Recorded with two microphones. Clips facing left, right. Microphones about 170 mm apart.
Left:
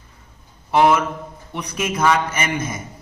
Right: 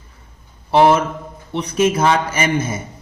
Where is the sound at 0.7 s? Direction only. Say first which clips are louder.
Right 3 dB; 30° right (ahead or behind).